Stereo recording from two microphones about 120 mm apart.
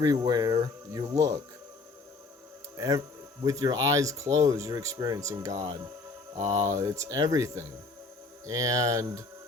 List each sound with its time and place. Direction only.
0.0 s speech: 35° right (ahead or behind)
2.7 s speech: 30° right (ahead or behind)